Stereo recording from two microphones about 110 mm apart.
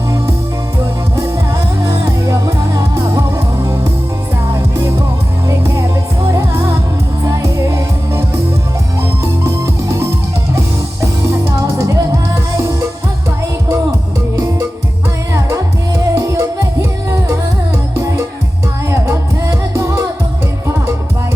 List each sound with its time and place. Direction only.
1.8 s music: 30° right (ahead or behind)
5.5 s music: 25° right (ahead or behind)
11.4 s music: 30° right (ahead or behind)
15.3 s music: 30° right (ahead or behind)